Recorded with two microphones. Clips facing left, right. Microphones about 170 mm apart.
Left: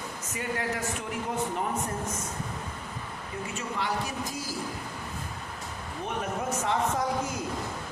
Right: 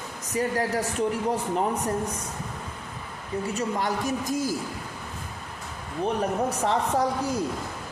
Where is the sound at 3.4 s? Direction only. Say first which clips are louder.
Right 5 dB; 40° right (ahead or behind).